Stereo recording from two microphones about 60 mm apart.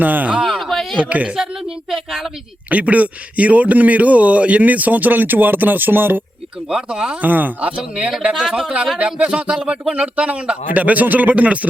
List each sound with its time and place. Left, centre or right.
0.0 s a man's voice: right
0.4 s a sound: centre
0.9 s a man's voice: right
1.9 s speech: centre
2.6 s a man's voice: right
6.7 s speech: centre
7.2 s speech: right
8.5 s a man's voice: centre